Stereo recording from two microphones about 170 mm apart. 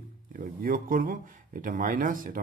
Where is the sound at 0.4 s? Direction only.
55° right (ahead or behind).